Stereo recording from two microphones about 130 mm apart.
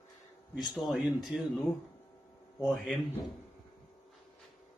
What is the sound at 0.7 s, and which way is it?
Speech, centre (ahead or behind).